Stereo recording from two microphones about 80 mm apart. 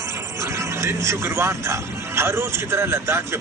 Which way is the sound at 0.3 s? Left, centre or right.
Right.